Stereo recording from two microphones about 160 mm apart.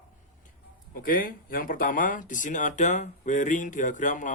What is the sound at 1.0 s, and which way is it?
Speech, 60° left (ahead or behind).